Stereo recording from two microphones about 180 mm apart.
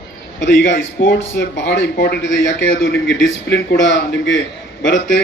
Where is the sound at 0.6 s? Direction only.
85° left.